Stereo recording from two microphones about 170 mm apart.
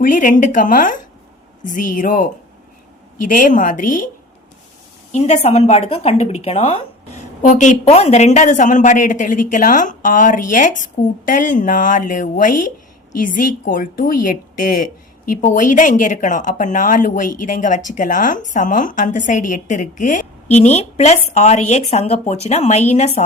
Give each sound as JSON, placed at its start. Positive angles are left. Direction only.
{"t": 0.0, "sound": "speech", "side_deg": 50}
{"t": 5.1, "sound": "speech", "side_deg": 40}